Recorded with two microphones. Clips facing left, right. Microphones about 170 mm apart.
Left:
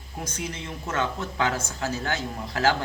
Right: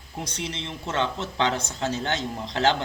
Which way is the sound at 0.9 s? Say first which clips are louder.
Right 1 dB; 20° right (ahead or behind).